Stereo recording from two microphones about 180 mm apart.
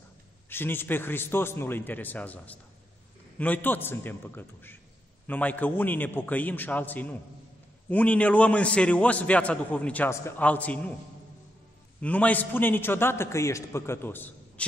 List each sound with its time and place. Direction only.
0.5 s a man's voice: 10° left (ahead or behind)
12.0 s a man's voice: 10° left (ahead or behind)